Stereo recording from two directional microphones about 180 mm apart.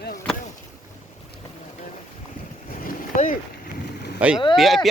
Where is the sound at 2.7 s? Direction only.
50° left (ahead or behind).